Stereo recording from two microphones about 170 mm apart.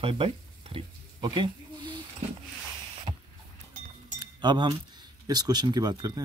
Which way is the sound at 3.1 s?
35° right (ahead or behind).